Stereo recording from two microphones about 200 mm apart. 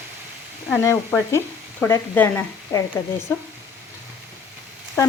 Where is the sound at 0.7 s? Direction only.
10° left (ahead or behind).